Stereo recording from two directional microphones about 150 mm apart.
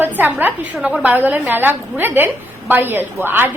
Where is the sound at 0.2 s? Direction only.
10° right (ahead or behind).